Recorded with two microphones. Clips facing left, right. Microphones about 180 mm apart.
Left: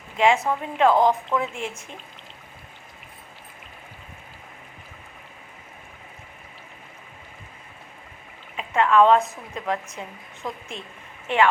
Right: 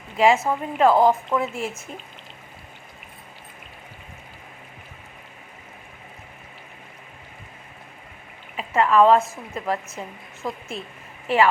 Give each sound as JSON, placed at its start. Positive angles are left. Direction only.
{"t": 0.2, "sound": "a woman's voice", "side_deg": -5}
{"t": 8.5, "sound": "a woman's voice", "side_deg": -5}